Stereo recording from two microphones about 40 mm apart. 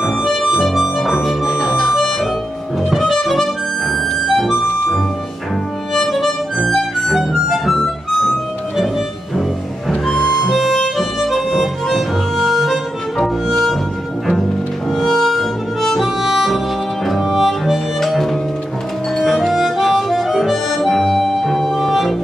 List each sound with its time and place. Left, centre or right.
0.2 s harmonica: centre
0.7 s harmonica: centre
1.8 s harmonica: centre
6.0 s harmonica: centre
7.4 s harmonica: centre
10.0 s harmonica: centre
14.9 s harmonica: centre
16.4 s music: centre
19.1 s harmonica: centre